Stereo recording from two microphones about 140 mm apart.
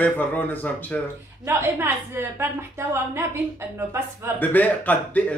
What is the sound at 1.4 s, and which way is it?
A woman's voice, 15° right (ahead or behind).